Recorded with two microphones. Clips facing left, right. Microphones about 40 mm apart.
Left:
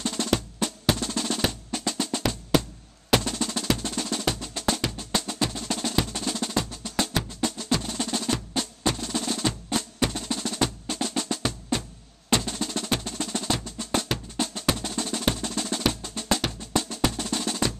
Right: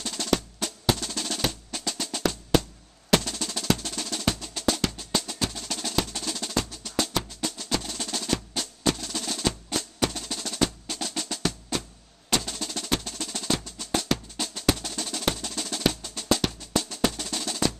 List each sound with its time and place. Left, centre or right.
0.1 s percussion: centre
4.4 s music: centre
12.3 s percussion: centre
13.7 s drum: centre
16.0 s music: left
16.7 s drum: centre